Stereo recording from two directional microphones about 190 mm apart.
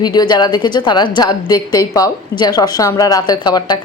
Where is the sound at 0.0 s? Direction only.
20° left (ahead or behind).